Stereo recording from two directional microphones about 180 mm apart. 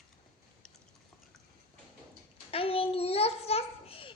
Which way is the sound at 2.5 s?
30° left (ahead or behind).